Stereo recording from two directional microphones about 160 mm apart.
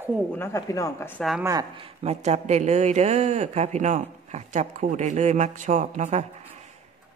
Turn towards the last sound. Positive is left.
turn(degrees=-45)  # may be behind; listen again after turning